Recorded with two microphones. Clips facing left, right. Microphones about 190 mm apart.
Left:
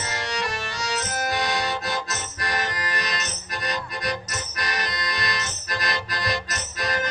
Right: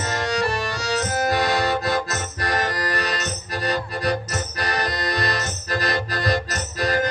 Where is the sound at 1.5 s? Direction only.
55° right (ahead or behind).